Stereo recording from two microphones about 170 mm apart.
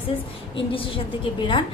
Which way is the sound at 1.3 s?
30° left (ahead or behind).